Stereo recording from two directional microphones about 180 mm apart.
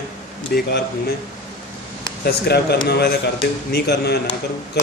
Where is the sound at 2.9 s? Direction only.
65° left (ahead or behind).